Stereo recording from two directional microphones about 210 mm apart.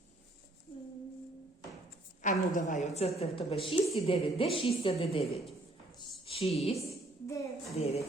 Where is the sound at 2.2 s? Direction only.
40° left (ahead or behind).